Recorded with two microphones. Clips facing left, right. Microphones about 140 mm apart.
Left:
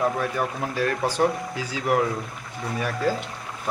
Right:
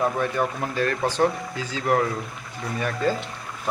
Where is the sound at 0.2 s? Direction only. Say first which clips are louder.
Right 2 dB; 5° left (ahead or behind).